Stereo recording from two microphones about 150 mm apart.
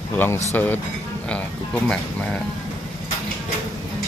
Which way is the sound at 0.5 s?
10° left (ahead or behind).